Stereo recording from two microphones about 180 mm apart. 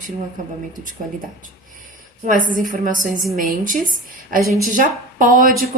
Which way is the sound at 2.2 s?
45° right (ahead or behind).